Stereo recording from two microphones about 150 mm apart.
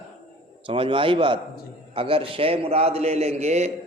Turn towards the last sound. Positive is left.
turn(degrees=-50)  # may be behind; listen again after turning